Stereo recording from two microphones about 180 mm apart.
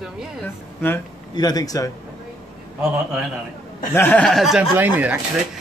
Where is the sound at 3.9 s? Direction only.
10° left (ahead or behind); by 5.2 s 10° right (ahead or behind).